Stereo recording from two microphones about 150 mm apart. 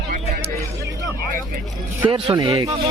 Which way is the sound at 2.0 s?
30° right (ahead or behind).